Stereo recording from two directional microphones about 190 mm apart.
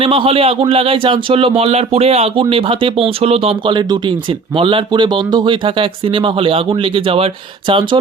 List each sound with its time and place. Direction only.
0.0 s speech: 30° right (ahead or behind)